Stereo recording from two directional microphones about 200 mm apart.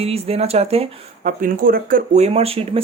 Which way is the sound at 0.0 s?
30° right (ahead or behind).